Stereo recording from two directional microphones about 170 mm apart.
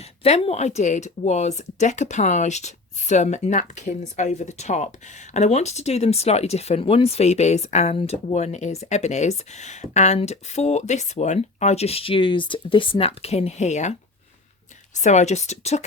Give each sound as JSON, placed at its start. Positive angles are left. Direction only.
{"t": 0.0, "sound": "speech", "side_deg": 40}
{"t": 14.9, "sound": "speech", "side_deg": 45}